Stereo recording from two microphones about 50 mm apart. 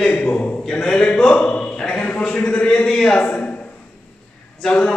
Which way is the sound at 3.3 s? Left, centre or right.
Left.